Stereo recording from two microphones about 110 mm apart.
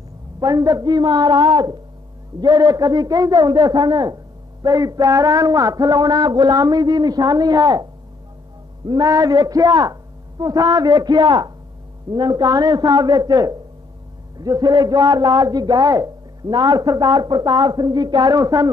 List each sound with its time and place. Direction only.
0.4 s a man's voice: 35° right (ahead or behind)